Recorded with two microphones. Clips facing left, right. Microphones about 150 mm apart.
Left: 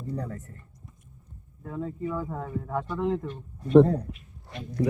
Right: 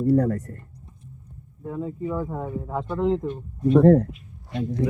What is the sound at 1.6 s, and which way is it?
Speech, 15° right (ahead or behind).